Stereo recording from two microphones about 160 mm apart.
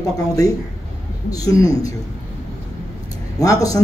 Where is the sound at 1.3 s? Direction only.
20° left (ahead or behind).